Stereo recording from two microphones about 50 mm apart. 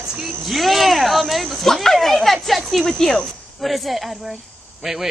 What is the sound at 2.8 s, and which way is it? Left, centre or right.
Speech, centre.